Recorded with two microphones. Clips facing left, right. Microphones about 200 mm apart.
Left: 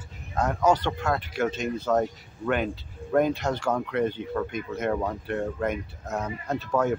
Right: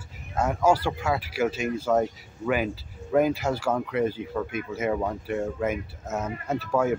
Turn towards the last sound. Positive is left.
turn(degrees=-5)  # may be behind; listen again after turning